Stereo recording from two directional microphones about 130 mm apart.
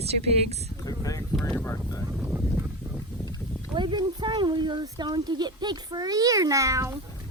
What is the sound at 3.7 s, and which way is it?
Speech, 35° right (ahead or behind).